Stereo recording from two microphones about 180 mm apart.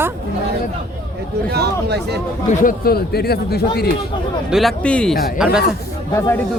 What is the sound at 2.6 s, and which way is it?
Speech, 60° left (ahead or behind).